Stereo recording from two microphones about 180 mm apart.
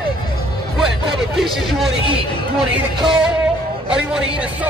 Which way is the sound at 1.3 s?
Centre (ahead or behind).